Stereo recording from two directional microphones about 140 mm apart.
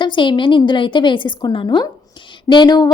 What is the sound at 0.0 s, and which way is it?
A woman's voice, 35° left (ahead or behind).